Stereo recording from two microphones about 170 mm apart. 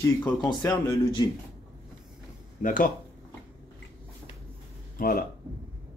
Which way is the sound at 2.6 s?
50° left (ahead or behind).